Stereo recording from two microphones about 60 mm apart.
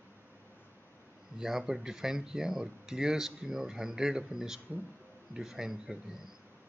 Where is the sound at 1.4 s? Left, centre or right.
Centre.